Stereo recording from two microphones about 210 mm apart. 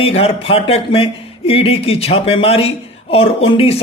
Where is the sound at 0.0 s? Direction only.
25° left (ahead or behind).